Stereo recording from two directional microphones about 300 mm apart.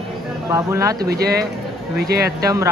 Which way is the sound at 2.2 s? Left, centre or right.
Centre.